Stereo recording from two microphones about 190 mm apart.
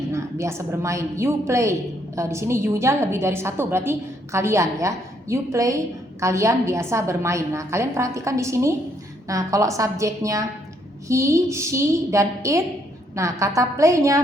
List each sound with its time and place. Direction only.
0.1 s a woman's voice: 15° right (ahead or behind)